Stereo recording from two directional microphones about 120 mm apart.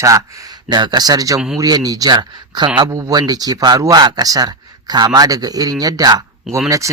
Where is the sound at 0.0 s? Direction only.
30° right (ahead or behind).